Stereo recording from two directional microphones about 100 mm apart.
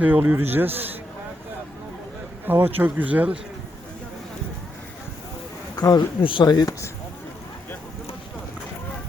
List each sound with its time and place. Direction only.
0.0 s a man's voice: 15° right (ahead or behind)
2.5 s speech: 20° right (ahead or behind)
5.7 s a sound: 40° left (ahead or behind)
6.2 s speech: 50° left (ahead or behind)